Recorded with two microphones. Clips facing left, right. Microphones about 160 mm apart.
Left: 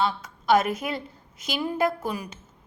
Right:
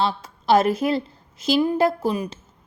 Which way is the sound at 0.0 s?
30° right (ahead or behind).